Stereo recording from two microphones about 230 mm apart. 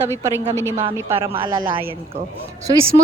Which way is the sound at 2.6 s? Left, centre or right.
Centre.